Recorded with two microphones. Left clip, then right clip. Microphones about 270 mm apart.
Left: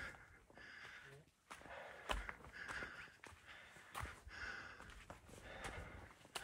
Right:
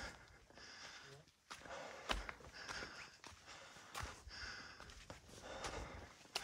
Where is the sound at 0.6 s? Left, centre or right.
Centre.